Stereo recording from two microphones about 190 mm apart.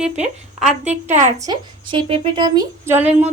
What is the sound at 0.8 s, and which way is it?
Speech, 35° right (ahead or behind).